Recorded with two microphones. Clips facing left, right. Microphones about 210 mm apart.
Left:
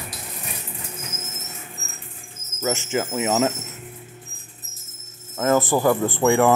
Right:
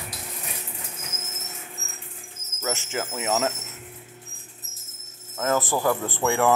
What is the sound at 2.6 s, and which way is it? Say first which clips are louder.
Speech: left 6 dB; 10° left (ahead or behind).